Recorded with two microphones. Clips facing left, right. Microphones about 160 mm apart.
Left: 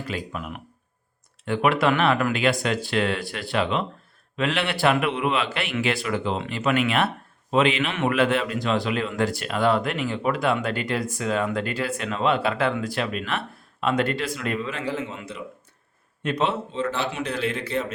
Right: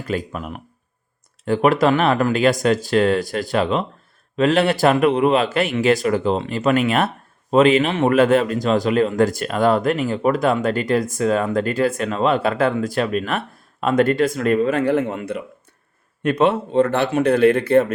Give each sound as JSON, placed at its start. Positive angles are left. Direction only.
{"t": 0.1, "sound": "a man's voice", "side_deg": -40}